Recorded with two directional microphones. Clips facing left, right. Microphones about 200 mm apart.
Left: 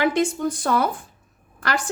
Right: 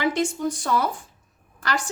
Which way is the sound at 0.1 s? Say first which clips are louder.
Left 2 dB; 55° left (ahead or behind).